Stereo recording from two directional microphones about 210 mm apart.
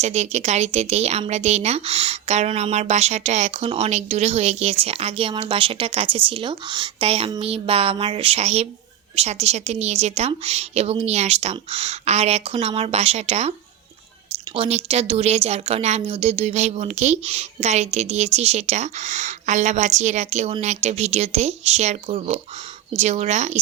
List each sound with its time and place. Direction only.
0.0 s a woman's voice: 30° right (ahead or behind)
14.5 s a woman's voice: 30° right (ahead or behind)